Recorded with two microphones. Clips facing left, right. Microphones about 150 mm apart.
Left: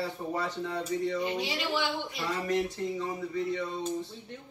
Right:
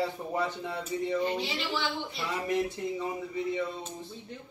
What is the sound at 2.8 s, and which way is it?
Speech, 15° right (ahead or behind).